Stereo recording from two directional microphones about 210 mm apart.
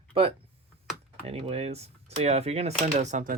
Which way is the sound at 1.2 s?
30° right (ahead or behind).